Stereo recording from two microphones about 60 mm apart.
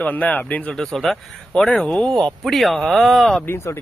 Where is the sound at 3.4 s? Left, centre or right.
Left.